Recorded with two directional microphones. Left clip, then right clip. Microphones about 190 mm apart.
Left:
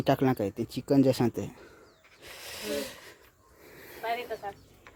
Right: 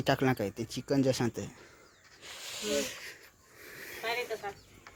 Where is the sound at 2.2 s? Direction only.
40° left (ahead or behind); by 3.2 s 25° left (ahead or behind).